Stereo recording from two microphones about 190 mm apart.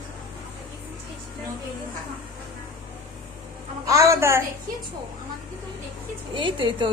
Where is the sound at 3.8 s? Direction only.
15° right (ahead or behind).